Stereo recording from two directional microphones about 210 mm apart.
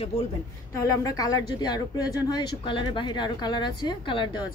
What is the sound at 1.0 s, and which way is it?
Speech, 15° left (ahead or behind).